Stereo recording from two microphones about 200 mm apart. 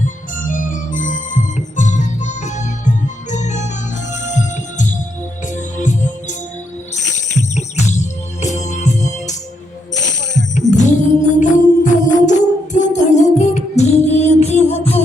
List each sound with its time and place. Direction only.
0.0 s organ: 40° left (ahead or behind)
4.1 s music: 35° left (ahead or behind)
10.7 s music: 35° left (ahead or behind)